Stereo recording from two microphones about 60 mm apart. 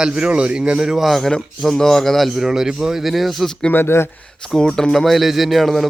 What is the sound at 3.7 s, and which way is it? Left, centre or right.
Speech, left.